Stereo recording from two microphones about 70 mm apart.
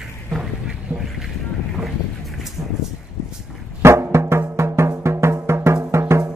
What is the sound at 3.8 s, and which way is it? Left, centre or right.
Music, right.